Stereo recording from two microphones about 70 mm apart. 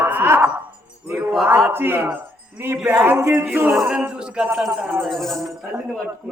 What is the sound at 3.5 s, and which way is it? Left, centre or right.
Speech, right.